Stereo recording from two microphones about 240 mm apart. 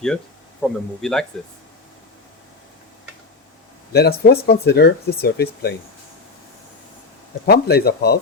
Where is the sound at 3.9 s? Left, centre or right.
Left.